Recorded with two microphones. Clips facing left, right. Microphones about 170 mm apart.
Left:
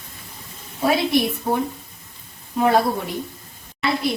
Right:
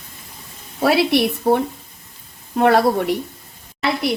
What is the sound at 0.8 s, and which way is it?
Speech, 75° right (ahead or behind).